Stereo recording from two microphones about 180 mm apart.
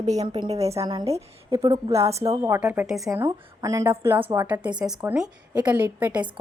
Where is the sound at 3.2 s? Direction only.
15° right (ahead or behind).